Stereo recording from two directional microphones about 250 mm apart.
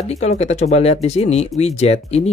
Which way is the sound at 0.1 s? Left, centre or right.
Left.